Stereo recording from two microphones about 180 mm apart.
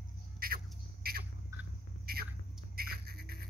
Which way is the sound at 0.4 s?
55° right (ahead or behind).